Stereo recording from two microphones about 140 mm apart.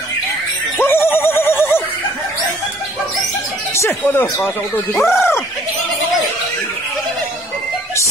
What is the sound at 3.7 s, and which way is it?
Speech, 15° left (ahead or behind).